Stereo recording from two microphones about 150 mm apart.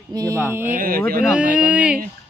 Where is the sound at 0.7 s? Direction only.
75° right (ahead or behind).